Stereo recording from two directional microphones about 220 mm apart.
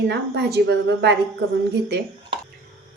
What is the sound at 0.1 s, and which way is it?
A woman's voice, 50° right (ahead or behind).